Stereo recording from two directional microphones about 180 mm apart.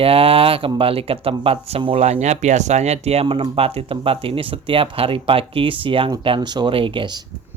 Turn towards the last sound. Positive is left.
turn(degrees=-25)  # may be behind; listen again after turning